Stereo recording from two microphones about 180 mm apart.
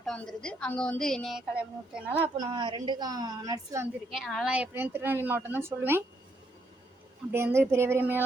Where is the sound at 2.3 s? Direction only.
25° right (ahead or behind).